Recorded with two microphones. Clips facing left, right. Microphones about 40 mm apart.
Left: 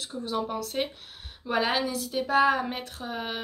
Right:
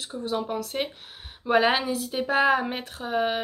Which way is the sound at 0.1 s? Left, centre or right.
Centre.